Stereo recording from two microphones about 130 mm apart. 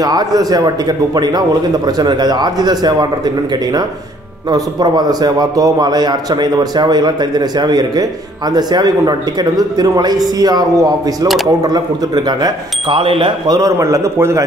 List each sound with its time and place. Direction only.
0.0 s a man's voice: 30° right (ahead or behind)
4.5 s a man's voice: 30° right (ahead or behind)
13.6 s a man's voice: 25° right (ahead or behind)